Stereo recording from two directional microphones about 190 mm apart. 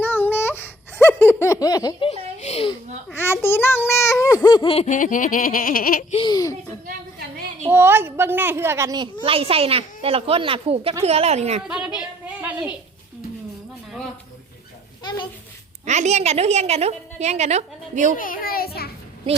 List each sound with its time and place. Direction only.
0.0 s laughter: 10° left (ahead or behind)
2.4 s a sound: 35° left (ahead or behind)
3.2 s a child's voice: 10° left (ahead or behind)
4.4 s laughter: 25° left (ahead or behind)
6.2 s a child's voice: 20° left (ahead or behind)
7.7 s a child's voice: 10° right (ahead or behind)
9.2 s a woman's voice: 30° right (ahead or behind)
11.9 s a sound: 5° right (ahead or behind)
15.0 s a sound: 20° left (ahead or behind)
15.9 s a woman's voice: 35° right (ahead or behind)
18.2 s children playing: 50° left (ahead or behind)